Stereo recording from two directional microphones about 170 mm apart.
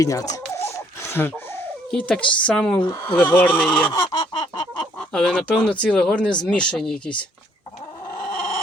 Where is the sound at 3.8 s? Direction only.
25° left (ahead or behind).